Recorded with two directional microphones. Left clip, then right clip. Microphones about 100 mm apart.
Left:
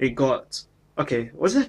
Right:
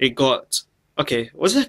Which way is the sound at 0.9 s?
15° right (ahead or behind).